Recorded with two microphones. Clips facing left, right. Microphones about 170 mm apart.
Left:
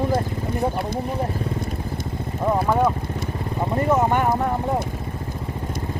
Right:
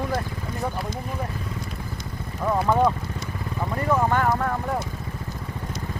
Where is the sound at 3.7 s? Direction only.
25° left (ahead or behind).